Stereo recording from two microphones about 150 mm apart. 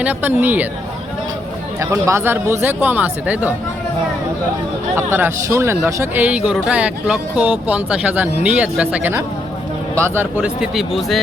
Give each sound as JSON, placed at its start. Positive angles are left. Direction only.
{"t": 0.0, "sound": "speech", "side_deg": -10}
{"t": 1.8, "sound": "speech", "side_deg": -20}
{"t": 4.9, "sound": "speech", "side_deg": -15}